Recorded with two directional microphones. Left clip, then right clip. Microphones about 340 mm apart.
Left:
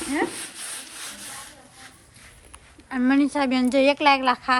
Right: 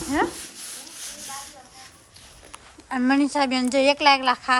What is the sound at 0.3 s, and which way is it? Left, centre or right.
Rub, centre.